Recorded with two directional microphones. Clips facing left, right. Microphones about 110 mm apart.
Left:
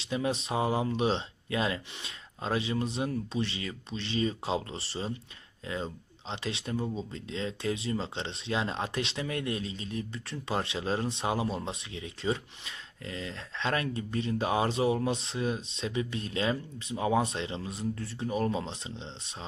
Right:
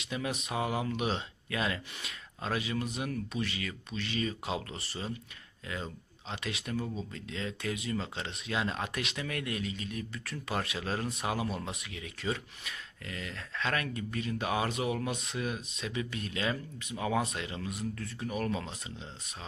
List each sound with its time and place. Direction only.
0.0 s speech: 30° left (ahead or behind)